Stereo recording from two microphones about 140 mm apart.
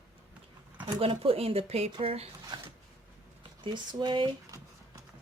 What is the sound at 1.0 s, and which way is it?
Speech, 40° right (ahead or behind).